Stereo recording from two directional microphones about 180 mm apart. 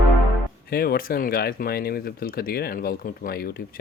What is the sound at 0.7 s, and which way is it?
Speech, 60° left (ahead or behind).